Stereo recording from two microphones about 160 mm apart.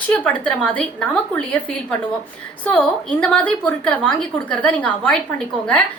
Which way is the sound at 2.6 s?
10° left (ahead or behind).